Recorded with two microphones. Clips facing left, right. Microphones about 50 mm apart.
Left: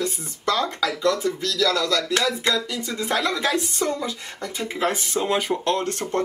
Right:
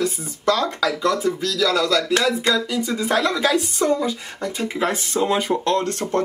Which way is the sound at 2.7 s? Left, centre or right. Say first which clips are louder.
Right 4 dB; centre.